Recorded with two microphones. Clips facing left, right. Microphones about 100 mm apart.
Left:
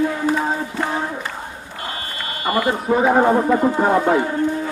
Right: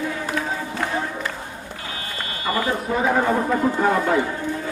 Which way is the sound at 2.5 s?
25° left (ahead or behind).